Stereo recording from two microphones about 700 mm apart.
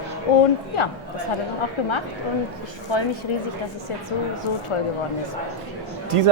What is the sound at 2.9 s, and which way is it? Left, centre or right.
Speech, left.